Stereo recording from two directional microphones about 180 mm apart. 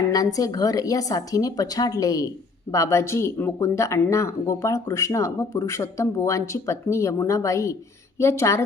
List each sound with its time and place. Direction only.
0.1 s speech: 20° left (ahead or behind)